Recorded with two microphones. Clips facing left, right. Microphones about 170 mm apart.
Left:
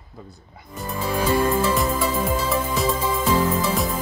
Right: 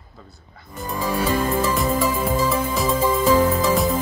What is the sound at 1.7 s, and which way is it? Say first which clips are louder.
Music: right 1 dB; centre (ahead or behind).